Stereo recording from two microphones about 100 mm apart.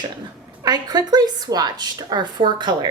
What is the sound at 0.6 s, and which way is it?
A woman's voice, 40° right (ahead or behind).